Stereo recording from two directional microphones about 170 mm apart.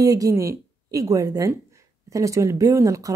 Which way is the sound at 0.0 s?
20° right (ahead or behind).